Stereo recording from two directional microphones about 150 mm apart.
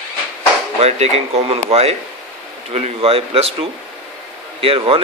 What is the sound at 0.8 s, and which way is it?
Speech, 45° right (ahead or behind).